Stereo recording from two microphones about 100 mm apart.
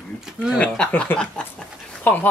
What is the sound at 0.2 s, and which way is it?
Speech, 5° right (ahead or behind).